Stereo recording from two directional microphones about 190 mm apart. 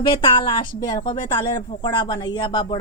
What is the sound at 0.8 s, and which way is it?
A woman's voice, 20° left (ahead or behind).